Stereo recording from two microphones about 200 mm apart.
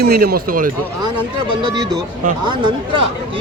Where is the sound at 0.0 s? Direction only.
50° right (ahead or behind).